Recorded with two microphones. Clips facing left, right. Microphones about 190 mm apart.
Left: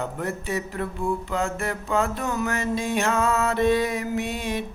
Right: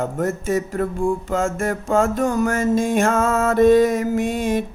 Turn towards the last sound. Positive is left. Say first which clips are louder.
# right 7 dB
turn(degrees=-45)  # may be behind; listen again after turning